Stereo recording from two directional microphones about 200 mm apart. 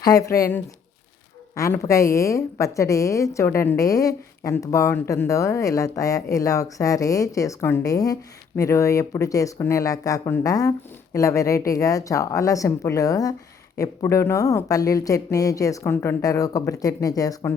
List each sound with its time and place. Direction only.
0.0 s a woman's voice: 15° left (ahead or behind)